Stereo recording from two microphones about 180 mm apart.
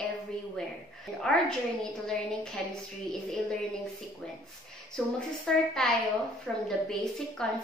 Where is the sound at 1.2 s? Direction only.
5° left (ahead or behind).